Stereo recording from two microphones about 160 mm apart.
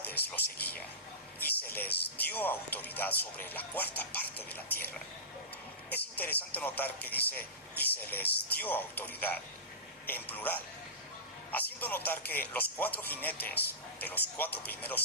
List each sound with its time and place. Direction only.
0.0 s speech: 10° left (ahead or behind)
5.9 s speech: 10° left (ahead or behind)